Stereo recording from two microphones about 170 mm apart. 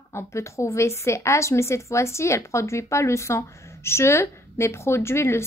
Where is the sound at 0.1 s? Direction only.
15° left (ahead or behind).